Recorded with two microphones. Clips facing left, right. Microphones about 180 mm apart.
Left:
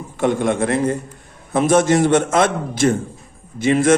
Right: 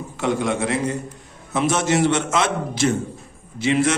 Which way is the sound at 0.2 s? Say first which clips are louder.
Left 4 dB; 50° left (ahead or behind).